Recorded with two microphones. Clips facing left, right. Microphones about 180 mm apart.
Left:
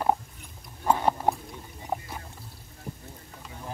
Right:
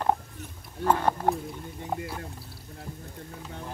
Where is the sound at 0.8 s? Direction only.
10° left (ahead or behind).